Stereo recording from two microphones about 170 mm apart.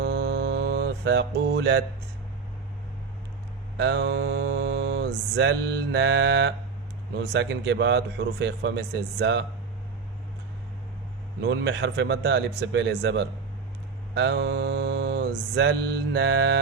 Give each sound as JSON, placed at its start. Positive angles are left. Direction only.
{"t": 0.0, "sound": "mantra", "side_deg": -75}
{"t": 3.8, "sound": "mantra", "side_deg": -90}
{"t": 7.2, "sound": "speech", "side_deg": -85}
{"t": 11.4, "sound": "speech", "side_deg": -90}
{"t": 14.2, "sound": "mantra", "side_deg": -90}
{"t": 16.1, "sound": "speech", "side_deg": -90}